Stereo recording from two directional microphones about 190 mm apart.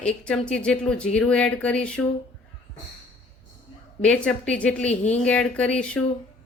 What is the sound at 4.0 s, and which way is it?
Speech, 5° left (ahead or behind).